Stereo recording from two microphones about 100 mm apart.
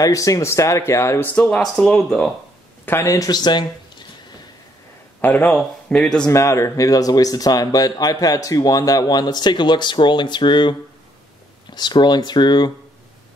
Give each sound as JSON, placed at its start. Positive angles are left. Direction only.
{"t": 0.0, "sound": "speech", "side_deg": 35}
{"t": 1.6, "sound": "speech", "side_deg": 5}
{"t": 2.8, "sound": "a man's voice", "side_deg": 25}
{"t": 3.3, "sound": "speech", "side_deg": 45}
{"t": 5.2, "sound": "speech", "side_deg": 15}
{"t": 6.2, "sound": "speech", "side_deg": 30}